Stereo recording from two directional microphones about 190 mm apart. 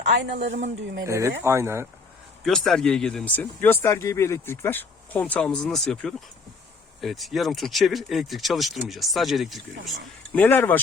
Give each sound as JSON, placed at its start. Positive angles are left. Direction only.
{"t": 0.3, "sound": "speech", "side_deg": -40}
{"t": 1.0, "sound": "speech", "side_deg": -15}
{"t": 2.4, "sound": "speech", "side_deg": 0}
{"t": 10.3, "sound": "speech", "side_deg": 10}